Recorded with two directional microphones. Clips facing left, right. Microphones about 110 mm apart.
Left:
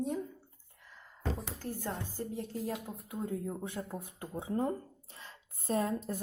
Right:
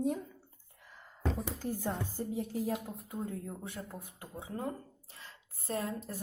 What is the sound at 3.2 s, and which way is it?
A woman's voice, 20° left (ahead or behind).